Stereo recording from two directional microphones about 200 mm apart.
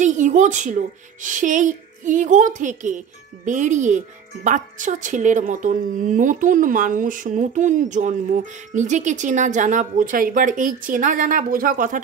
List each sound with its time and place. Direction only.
0.0 s a woman's voice: 40° right (ahead or behind)